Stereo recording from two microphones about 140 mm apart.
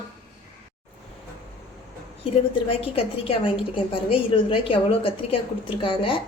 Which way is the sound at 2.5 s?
40° left (ahead or behind).